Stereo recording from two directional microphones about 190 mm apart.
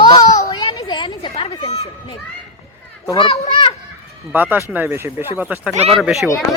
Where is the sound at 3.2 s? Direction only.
30° left (ahead or behind).